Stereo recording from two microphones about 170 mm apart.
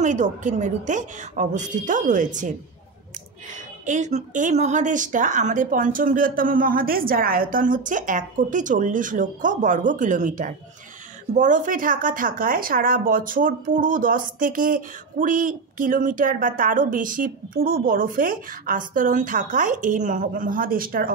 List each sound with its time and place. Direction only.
0.0 s speech: 45° right (ahead or behind)
3.5 s speech: 45° right (ahead or behind)